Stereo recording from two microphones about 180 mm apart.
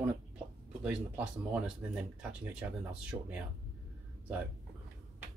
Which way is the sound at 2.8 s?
5° right (ahead or behind).